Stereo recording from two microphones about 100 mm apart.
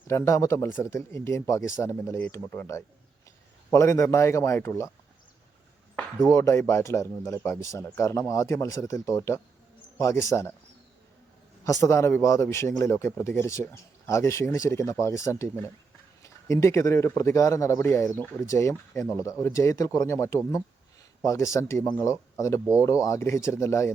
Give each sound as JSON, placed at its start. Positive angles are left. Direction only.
{"t": 0.1, "sound": "a man's voice", "side_deg": 30}
{"t": 6.3, "sound": "a man's voice", "side_deg": 30}
{"t": 11.6, "sound": "a man's voice", "side_deg": 30}